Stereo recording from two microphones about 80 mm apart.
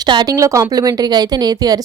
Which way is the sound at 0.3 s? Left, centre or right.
Right.